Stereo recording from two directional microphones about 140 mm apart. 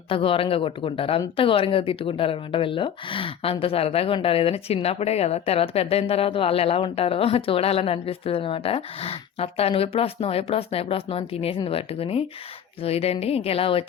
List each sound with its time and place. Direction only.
0.1 s speech: 40° left (ahead or behind)